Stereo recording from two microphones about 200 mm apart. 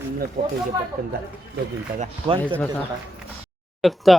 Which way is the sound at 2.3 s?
25° right (ahead or behind).